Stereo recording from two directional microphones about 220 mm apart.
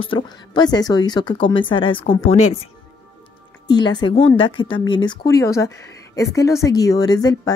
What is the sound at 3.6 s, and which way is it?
A woman's voice, 20° left (ahead or behind).